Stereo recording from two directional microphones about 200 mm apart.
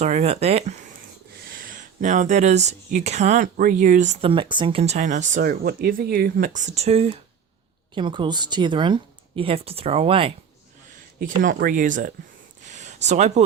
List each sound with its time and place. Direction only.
0.0 s speech: 35° right (ahead or behind)
1.5 s speech: 45° right (ahead or behind); by 10.3 s 25° right (ahead or behind)
11.2 s speech: 40° right (ahead or behind)
12.6 s a sound: 35° right (ahead or behind)